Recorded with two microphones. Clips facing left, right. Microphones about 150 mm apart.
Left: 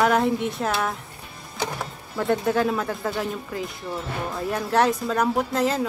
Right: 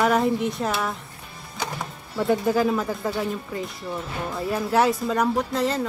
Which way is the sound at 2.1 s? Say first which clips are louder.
Right 1 dB; centre (ahead or behind).